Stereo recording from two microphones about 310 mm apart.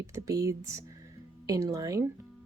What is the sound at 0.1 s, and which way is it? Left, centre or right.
Speech, centre.